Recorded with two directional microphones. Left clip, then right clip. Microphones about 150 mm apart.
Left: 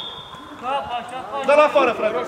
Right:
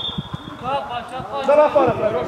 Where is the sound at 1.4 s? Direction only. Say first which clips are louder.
Right 1 dB; 40° left (ahead or behind).